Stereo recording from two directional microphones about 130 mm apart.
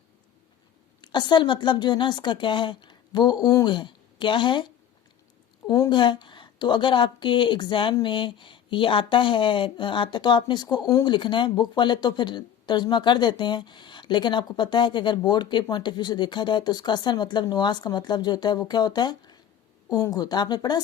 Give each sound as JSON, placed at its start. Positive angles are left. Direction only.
{"t": 1.0, "sound": "speech", "side_deg": 35}
{"t": 5.6, "sound": "speech", "side_deg": 30}